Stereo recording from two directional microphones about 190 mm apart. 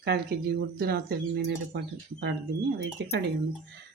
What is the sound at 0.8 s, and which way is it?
Speech, 55° right (ahead or behind).